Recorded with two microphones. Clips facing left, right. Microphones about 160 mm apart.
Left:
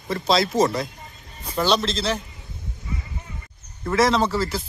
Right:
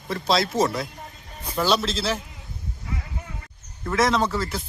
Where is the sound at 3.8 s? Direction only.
Centre (ahead or behind).